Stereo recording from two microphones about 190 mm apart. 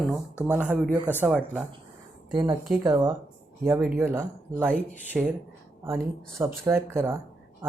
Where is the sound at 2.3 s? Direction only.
20° right (ahead or behind).